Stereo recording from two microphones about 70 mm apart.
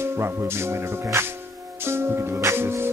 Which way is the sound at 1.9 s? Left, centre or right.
Right.